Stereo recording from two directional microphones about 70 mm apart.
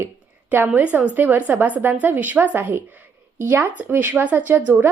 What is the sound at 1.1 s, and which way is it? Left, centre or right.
A woman's voice, right.